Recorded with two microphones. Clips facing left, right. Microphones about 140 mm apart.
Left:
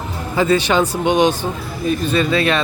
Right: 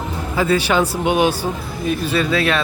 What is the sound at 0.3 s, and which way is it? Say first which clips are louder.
Speech: left 2 dB; 5° right (ahead or behind).